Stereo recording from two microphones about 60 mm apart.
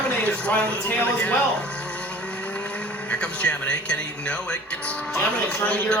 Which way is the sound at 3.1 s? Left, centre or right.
Centre.